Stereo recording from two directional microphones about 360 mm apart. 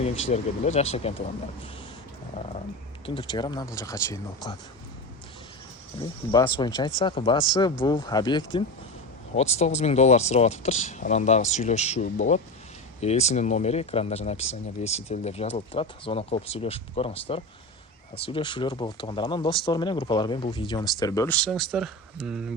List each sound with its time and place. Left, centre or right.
0.0 s speech: centre
3.2 s speech: centre
6.0 s speech: centre